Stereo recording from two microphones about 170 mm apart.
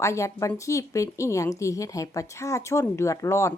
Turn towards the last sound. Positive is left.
turn(degrees=15)  # may be behind; listen again after turning